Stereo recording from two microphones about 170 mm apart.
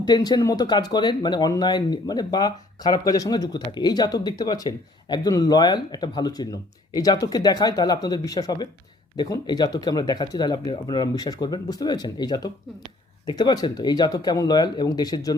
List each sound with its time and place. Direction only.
0.0 s speech: 25° left (ahead or behind)